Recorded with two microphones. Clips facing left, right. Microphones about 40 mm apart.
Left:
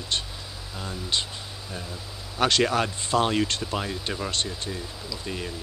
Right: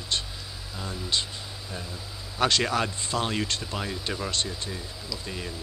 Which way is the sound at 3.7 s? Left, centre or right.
Centre.